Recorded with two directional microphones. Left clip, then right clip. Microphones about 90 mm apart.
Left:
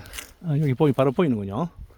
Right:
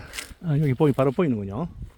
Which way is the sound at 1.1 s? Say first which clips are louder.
Left 2 dB; 30° left (ahead or behind).